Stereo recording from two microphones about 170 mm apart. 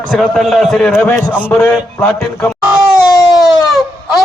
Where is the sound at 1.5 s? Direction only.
15° left (ahead or behind).